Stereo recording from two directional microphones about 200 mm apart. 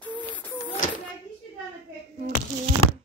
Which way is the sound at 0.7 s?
40° left (ahead or behind).